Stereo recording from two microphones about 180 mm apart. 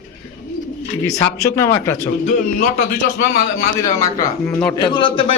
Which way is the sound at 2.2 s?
45° left (ahead or behind).